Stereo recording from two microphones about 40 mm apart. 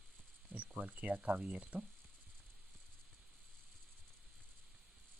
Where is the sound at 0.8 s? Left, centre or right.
Right.